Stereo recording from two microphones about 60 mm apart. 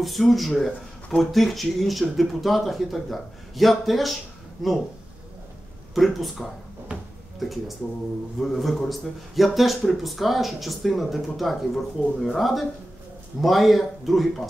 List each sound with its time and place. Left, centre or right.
0.0 s speech: centre
5.9 s speech: centre
6.9 s a sound: right
7.3 s speech: centre